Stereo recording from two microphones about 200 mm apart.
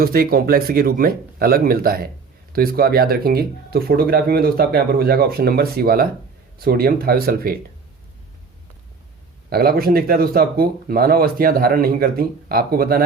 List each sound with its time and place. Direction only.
0.0 s speech: 50° right (ahead or behind)
9.5 s speech: 50° right (ahead or behind)